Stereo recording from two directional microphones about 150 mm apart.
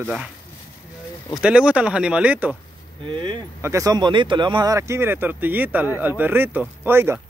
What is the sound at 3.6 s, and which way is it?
Speech, 20° right (ahead or behind).